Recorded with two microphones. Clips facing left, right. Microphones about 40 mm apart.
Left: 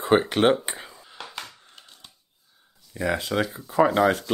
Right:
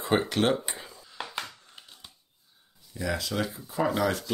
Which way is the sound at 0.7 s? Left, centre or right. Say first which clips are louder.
Left 3 dB; left.